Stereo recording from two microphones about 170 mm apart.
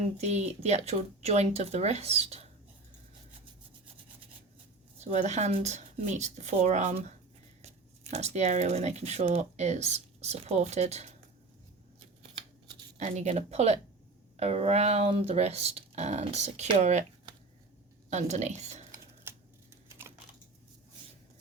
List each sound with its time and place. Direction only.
0.2 s speech: 40° right (ahead or behind)
4.9 s speech: 40° right (ahead or behind)
8.1 s speech: 40° right (ahead or behind)
13.0 s speech: 40° right (ahead or behind)
18.1 s speech: 40° right (ahead or behind)
19.3 s typewriter: 15° right (ahead or behind)
19.9 s typing: 15° right (ahead or behind)